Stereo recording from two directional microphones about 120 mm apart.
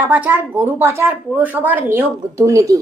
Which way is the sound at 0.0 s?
15° right (ahead or behind).